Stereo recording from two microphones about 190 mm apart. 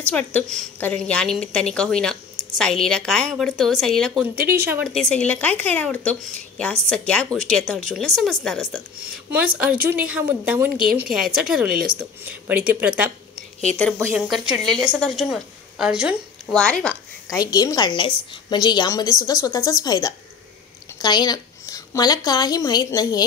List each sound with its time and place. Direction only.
0.1 s a woman's voice: 10° left (ahead or behind); by 13.1 s 10° right (ahead or behind)
14.1 s a woman's voice: 5° right (ahead or behind)
17.4 s a woman's voice: 20° left (ahead or behind)